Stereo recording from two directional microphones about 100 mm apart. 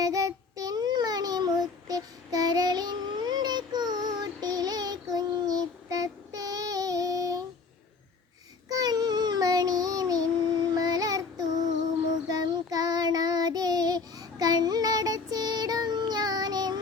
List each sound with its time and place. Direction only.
0.0 s child singing: 40° right (ahead or behind)
8.7 s child singing: 40° right (ahead or behind)